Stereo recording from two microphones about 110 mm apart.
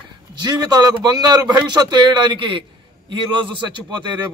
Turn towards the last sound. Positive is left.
turn(degrees=-45)  # may be behind; listen again after turning